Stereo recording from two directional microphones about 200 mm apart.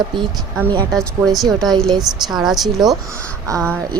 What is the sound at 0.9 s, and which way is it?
Speech, centre (ahead or behind).